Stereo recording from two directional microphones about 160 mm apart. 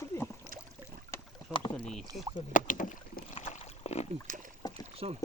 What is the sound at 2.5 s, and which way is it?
Rowboat, 55° left (ahead or behind).